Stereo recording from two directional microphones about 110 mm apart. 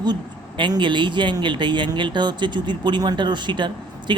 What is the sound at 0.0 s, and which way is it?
Speech, 45° right (ahead or behind).